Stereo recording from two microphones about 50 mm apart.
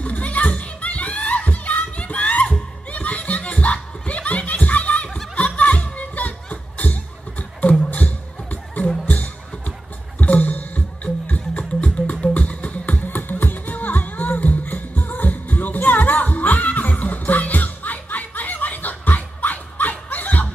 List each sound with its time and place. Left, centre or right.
0.0 s children playing: left
5.6 s music: left
5.9 s a sound: left
7.9 s music: left